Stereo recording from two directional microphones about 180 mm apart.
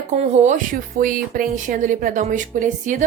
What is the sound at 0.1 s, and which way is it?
A woman's voice, 40° right (ahead or behind).